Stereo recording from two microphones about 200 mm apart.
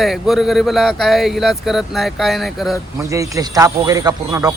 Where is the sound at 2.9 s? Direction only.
15° right (ahead or behind).